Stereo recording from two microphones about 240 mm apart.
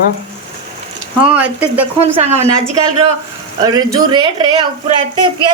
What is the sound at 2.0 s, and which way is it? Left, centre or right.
Speech, right.